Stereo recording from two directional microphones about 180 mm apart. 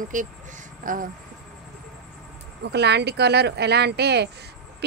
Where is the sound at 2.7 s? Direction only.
70° right (ahead or behind).